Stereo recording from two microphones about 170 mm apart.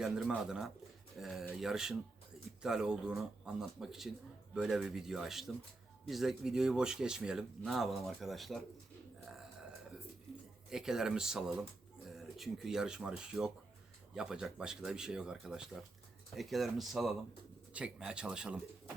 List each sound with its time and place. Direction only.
0.0 s speech: 5° right (ahead or behind)
10.7 s speech: 5° right (ahead or behind)